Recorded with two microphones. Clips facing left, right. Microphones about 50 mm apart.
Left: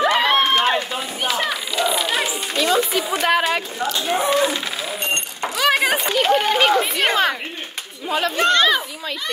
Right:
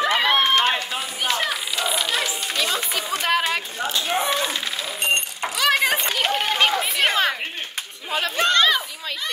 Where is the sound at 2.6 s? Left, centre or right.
Centre.